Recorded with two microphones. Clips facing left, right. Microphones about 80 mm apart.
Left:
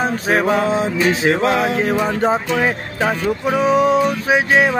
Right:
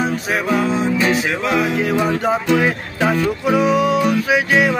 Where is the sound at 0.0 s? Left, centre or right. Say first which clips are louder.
Left 3 dB; left.